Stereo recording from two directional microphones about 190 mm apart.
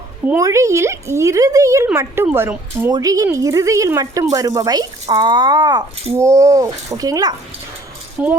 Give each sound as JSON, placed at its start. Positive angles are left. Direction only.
{"t": 0.3, "sound": "speech", "side_deg": -15}
{"t": 8.2, "sound": "speech", "side_deg": -10}